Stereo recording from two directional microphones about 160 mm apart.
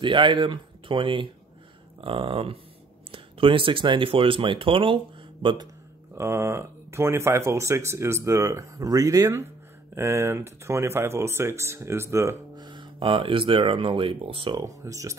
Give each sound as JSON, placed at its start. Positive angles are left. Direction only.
{"t": 0.0, "sound": "speech", "side_deg": -30}
{"t": 6.1, "sound": "speech", "side_deg": -15}
{"t": 14.6, "sound": "speech", "side_deg": -20}